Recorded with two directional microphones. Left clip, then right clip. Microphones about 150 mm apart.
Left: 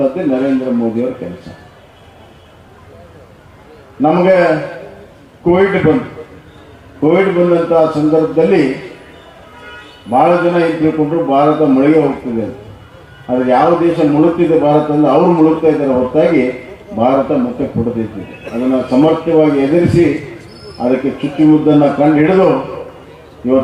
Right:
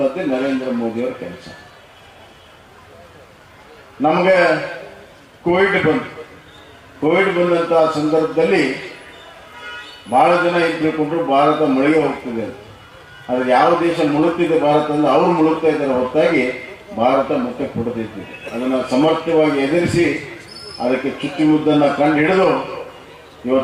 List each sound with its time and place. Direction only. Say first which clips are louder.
0.0 s a man's voice: left 4 dB; 15° left (ahead or behind)
4.0 s a man's voice: left 3 dB; 15° left (ahead or behind)